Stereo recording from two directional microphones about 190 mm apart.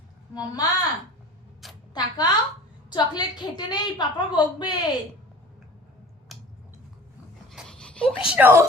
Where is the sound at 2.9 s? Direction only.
20° left (ahead or behind).